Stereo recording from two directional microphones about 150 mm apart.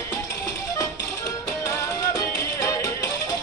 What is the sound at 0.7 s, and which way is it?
Music, 20° left (ahead or behind).